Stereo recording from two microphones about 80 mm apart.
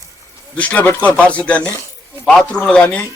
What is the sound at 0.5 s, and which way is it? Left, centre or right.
Speech, centre.